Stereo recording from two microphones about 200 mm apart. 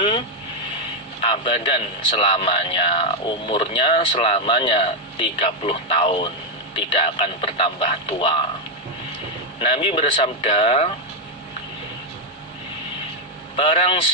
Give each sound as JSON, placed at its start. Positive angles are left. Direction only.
{"t": 1.2, "sound": "a man's voice", "side_deg": 25}
{"t": 9.6, "sound": "a man's voice", "side_deg": 30}
{"t": 13.6, "sound": "a man's voice", "side_deg": 25}